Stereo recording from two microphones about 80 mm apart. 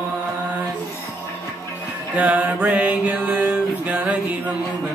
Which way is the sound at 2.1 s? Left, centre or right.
Centre.